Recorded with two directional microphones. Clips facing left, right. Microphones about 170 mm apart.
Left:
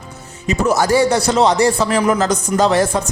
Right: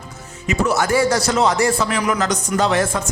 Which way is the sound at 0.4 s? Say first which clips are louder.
Left 3 dB; 35° left (ahead or behind).